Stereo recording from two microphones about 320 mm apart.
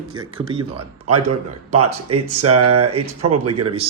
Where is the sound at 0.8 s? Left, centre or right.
Right.